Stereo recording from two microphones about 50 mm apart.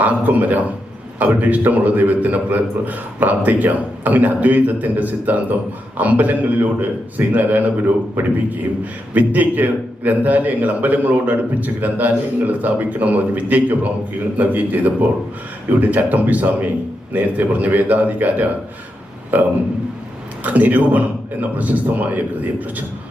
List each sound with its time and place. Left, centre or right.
0.0 s a man's voice: right
15.8 s a man's voice: right